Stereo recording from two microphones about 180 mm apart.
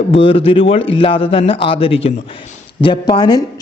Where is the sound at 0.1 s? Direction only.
30° left (ahead or behind).